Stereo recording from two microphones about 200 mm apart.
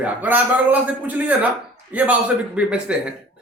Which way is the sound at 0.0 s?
10° right (ahead or behind).